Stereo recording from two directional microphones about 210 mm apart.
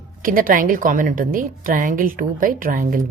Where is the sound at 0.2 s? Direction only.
40° right (ahead or behind).